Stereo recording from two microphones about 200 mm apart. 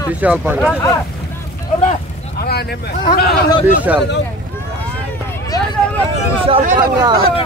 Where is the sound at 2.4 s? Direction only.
50° left (ahead or behind).